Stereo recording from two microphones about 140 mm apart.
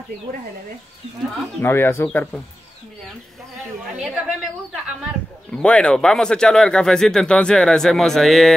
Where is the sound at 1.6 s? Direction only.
15° left (ahead or behind).